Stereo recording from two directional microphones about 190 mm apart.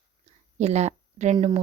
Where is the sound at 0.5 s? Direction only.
35° right (ahead or behind).